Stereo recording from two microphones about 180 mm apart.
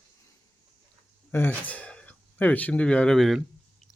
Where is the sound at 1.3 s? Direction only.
10° left (ahead or behind).